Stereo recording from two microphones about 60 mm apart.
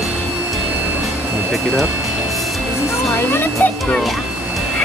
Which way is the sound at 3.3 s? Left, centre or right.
Left.